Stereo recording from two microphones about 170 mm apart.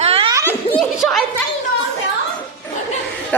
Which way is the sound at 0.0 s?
35° right (ahead or behind).